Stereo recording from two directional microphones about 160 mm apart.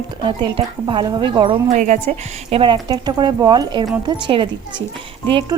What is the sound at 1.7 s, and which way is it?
Speech, 50° right (ahead or behind).